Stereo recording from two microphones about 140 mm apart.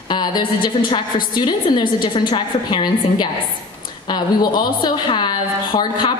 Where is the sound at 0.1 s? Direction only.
30° left (ahead or behind).